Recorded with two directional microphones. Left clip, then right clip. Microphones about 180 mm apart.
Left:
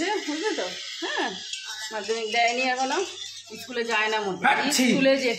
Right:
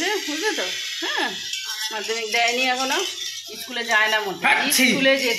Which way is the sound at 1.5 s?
30° left (ahead or behind).